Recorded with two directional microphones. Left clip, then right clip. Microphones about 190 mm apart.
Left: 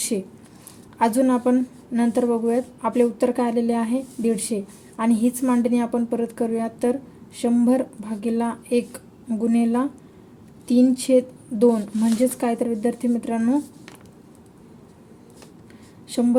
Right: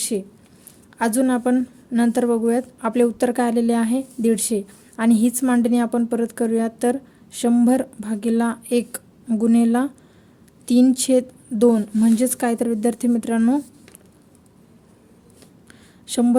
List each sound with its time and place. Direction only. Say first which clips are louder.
0.1 s speech: right 1 dB; 30° right (ahead or behind)
16.0 s speech: right 2 dB; 40° right (ahead or behind)